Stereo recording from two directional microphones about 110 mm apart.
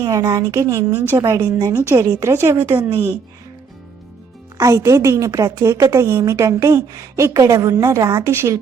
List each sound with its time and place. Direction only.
0.0 s speech: 35° right (ahead or behind)
1.9 s speech: 25° right (ahead or behind)
4.5 s speech: 30° right (ahead or behind)